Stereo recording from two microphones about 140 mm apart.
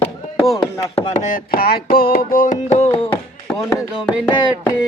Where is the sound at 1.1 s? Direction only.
80° left; by 3.2 s 45° left (ahead or behind).